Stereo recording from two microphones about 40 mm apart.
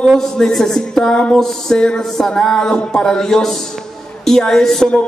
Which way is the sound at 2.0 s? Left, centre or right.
Centre.